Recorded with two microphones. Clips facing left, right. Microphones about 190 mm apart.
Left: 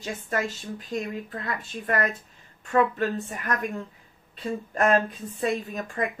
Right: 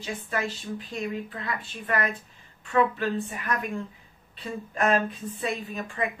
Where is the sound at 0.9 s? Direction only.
40° left (ahead or behind).